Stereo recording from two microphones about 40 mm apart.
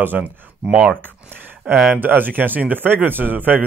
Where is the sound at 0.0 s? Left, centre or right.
Right.